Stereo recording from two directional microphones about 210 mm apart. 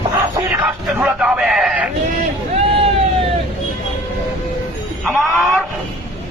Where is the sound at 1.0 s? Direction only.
5° right (ahead or behind).